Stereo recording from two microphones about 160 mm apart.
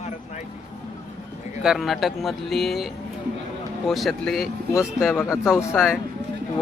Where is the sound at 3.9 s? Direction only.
Centre (ahead or behind).